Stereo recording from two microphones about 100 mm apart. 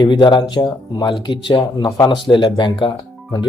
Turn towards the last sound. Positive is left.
turn(degrees=45)  # may be behind; listen again after turning